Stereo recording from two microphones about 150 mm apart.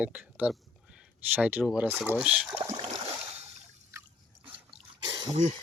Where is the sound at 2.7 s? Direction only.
40° right (ahead or behind).